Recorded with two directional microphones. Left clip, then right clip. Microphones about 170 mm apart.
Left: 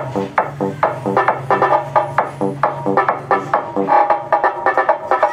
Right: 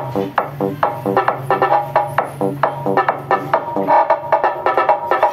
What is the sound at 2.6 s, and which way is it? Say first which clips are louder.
Music: left 1 dB; 50° right (ahead or behind).